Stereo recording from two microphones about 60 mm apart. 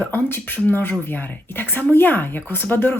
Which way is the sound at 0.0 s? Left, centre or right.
Left.